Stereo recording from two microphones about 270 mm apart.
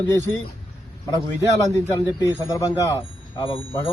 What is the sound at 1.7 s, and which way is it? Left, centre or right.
Speech, centre.